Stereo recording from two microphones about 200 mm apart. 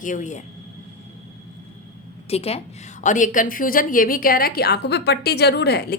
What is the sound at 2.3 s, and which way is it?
A woman's voice, 30° left (ahead or behind).